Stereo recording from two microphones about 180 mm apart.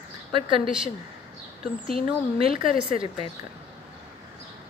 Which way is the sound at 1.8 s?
30° right (ahead or behind).